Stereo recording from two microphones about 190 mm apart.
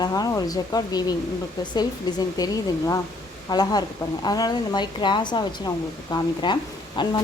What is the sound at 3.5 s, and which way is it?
Speech, 20° left (ahead or behind).